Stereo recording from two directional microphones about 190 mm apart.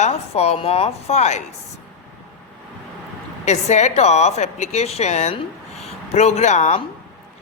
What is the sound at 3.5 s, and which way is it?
A woman's voice, 35° left (ahead or behind).